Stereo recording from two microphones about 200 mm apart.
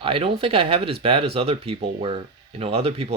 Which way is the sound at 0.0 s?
25° right (ahead or behind).